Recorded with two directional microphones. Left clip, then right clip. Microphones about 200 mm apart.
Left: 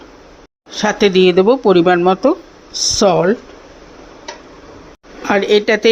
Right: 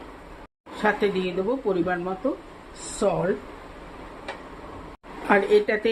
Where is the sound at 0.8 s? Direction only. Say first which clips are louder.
Left 11 dB; 50° left (ahead or behind).